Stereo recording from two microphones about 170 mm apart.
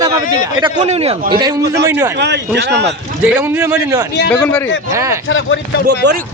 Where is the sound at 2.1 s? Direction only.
85° right.